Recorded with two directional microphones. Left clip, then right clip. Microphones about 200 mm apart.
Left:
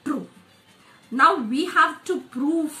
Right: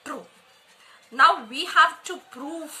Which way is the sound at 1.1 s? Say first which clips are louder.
Even; 30° right (ahead or behind).